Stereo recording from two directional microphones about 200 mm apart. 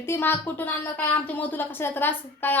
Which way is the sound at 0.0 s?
10° left (ahead or behind).